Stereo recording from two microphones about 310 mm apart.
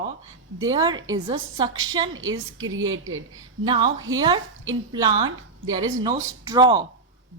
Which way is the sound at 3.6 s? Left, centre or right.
Centre.